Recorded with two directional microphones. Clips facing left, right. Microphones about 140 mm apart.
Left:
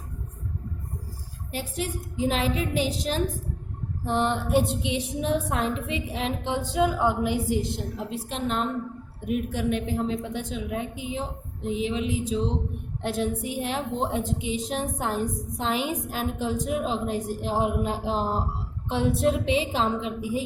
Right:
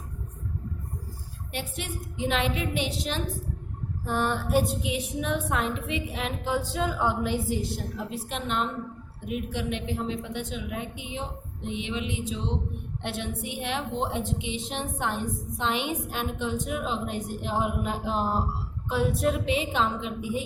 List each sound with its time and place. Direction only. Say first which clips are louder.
1.5 s a woman's voice: left 4 dB; 35° left (ahead or behind)
4.0 s a woman's voice: left 2 dB; 20° left (ahead or behind)